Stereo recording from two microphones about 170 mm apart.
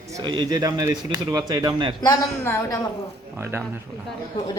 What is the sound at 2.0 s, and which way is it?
Speech, 15° left (ahead or behind).